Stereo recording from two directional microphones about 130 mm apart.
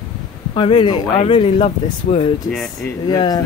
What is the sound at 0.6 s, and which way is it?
Speech, 40° left (ahead or behind).